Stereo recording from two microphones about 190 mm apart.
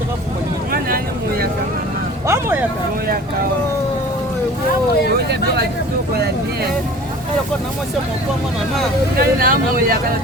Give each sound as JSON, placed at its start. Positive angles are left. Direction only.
{"t": 2.2, "sound": "vehicle", "side_deg": -10}
{"t": 5.1, "sound": "speech", "side_deg": -55}
{"t": 9.1, "sound": "speech", "side_deg": -50}